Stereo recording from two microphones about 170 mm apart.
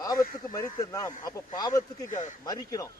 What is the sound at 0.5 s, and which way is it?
Speech, 20° left (ahead or behind).